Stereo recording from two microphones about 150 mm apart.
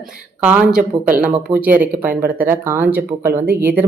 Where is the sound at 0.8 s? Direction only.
60° right (ahead or behind).